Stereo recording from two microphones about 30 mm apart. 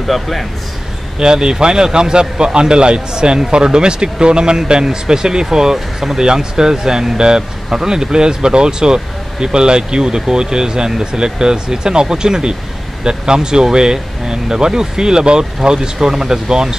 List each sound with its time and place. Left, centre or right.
0.0 s speech: centre
1.2 s speech: right